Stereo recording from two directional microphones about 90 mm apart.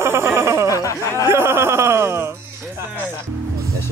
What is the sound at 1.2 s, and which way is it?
Speech, 25° right (ahead or behind).